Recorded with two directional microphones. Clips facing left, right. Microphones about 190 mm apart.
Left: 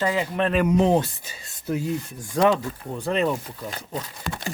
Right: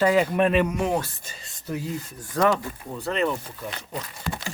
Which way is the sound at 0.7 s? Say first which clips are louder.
Left 6 dB; 25° left (ahead or behind).